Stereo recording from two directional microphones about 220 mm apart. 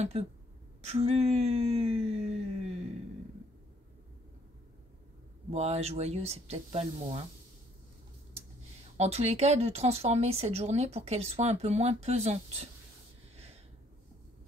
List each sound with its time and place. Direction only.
0.1 s speech: 25° right (ahead or behind)
5.5 s speech: 30° right (ahead or behind)
8.9 s speech: 30° right (ahead or behind)